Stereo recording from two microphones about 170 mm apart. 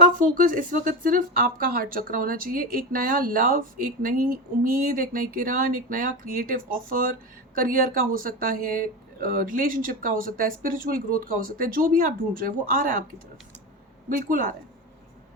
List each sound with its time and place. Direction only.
0.2 s speech: 50° right (ahead or behind)
14.2 s speech: 50° right (ahead or behind)